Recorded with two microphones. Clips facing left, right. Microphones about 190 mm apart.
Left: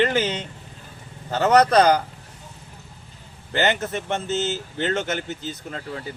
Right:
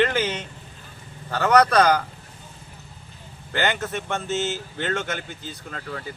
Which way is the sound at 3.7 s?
20° left (ahead or behind).